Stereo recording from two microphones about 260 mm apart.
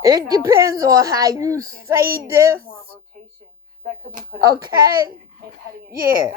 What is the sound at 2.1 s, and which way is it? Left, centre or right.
Speech, right.